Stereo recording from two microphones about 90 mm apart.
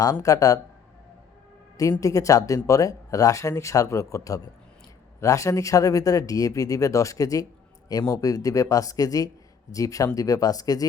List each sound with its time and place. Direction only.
0.0 s speech: 40° left (ahead or behind)
1.8 s speech: 40° left (ahead or behind)